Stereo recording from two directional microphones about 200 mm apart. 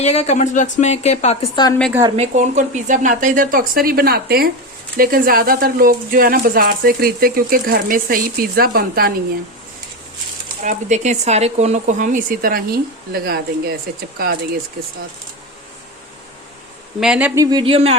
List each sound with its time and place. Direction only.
0.0 s a woman's voice: 35° left (ahead or behind)
1.9 s speech: 15° right (ahead or behind)
2.1 s speech: 35° right (ahead or behind)
10.6 s speech: 40° right (ahead or behind); by 14.9 s 55° right (ahead or behind)
17.0 s speech: 5° right (ahead or behind); by 17.9 s 30° right (ahead or behind)